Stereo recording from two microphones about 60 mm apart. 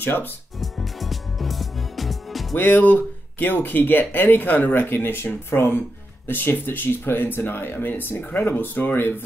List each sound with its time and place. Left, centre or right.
0.0 s speech: left
0.6 s music: centre
2.5 s speech: left